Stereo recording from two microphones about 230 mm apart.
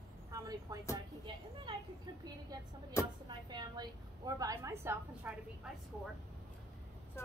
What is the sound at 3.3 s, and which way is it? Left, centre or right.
A woman's voice, centre.